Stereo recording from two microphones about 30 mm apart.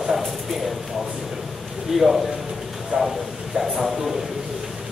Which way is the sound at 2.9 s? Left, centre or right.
Right.